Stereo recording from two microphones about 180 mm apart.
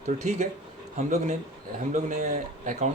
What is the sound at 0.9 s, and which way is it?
Speech, 40° right (ahead or behind).